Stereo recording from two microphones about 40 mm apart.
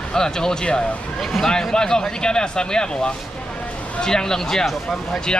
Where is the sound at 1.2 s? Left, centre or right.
Centre.